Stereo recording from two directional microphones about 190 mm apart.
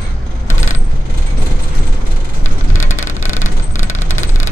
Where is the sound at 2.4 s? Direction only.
90° left.